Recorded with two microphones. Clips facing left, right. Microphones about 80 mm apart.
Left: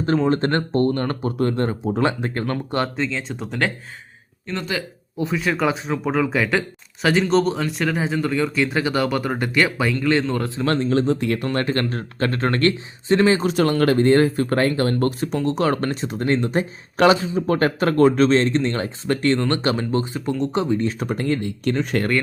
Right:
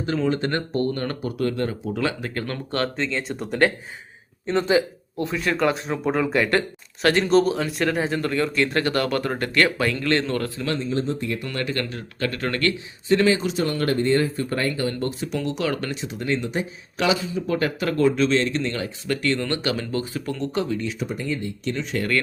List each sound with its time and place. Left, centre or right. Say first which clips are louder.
0.3 s speech: left 4 dB; left; by 2.9 s centre
2.9 s speech: left 1 dB; centre
4.4 s speech: right 7 dB; right
5.1 s speech: left 2 dB; centre
10.8 s speech: left 6 dB; left
11.4 s speech: left 5 dB; left
13.5 s speech: left 5 dB; left
15.2 s speech: left 5 dB; left
20.8 s speech: left 5 dB; left